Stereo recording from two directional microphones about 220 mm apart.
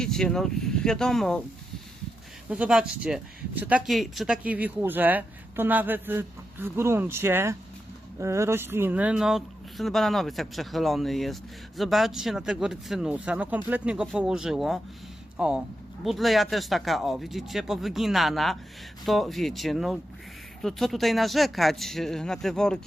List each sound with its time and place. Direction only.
0.0 s speech: centre (ahead or behind)
2.5 s speech: 5° right (ahead or behind)